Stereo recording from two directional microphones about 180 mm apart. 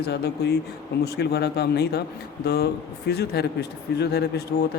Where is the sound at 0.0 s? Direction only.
65° left (ahead or behind).